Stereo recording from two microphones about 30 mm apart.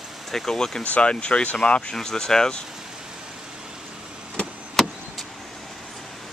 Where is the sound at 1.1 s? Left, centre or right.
Left.